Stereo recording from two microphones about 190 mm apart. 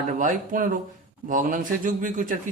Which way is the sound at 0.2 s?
45° right (ahead or behind).